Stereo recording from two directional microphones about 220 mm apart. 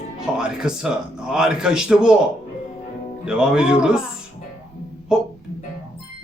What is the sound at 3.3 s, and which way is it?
Speech, 5° right (ahead or behind).